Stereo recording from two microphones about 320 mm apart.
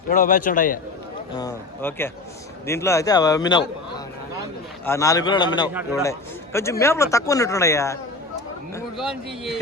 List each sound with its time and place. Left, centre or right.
0.1 s a man's voice: left
1.4 s speech: centre
4.9 s speech: centre
9.0 s a man's voice: centre